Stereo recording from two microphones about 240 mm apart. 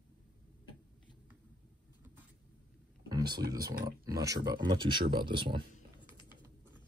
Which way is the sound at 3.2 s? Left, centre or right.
Right.